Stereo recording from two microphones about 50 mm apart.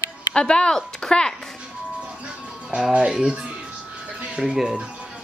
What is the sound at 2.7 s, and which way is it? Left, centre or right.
Speech, centre.